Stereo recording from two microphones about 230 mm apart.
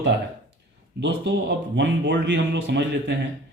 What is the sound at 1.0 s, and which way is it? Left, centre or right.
Speech, right.